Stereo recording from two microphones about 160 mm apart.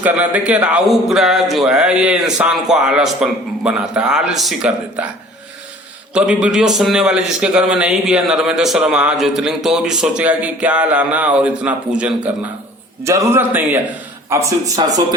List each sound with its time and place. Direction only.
0.0 s speech: 10° right (ahead or behind)
6.1 s speech: 5° right (ahead or behind)
9.6 s a sound: 5° right (ahead or behind)
14.8 s speech: 25° right (ahead or behind)